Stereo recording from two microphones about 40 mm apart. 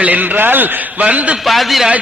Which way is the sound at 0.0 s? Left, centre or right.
Right.